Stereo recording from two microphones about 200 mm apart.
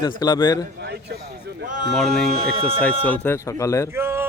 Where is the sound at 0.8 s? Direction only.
55° right (ahead or behind).